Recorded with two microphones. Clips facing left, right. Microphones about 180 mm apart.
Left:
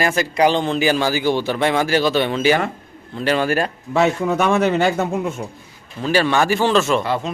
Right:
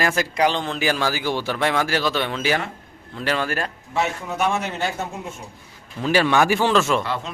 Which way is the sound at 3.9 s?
80° left.